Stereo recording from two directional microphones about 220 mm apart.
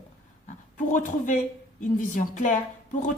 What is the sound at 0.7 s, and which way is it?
Speech, 35° left (ahead or behind).